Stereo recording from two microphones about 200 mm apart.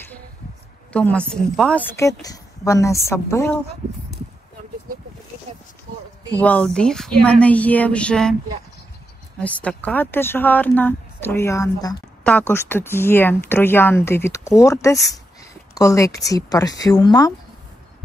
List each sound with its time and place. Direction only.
0.9 s speech: 5° left (ahead or behind)
2.0 s speech: 15° left (ahead or behind)
6.3 s speech: 5° left (ahead or behind)
9.4 s speech: 5° left (ahead or behind)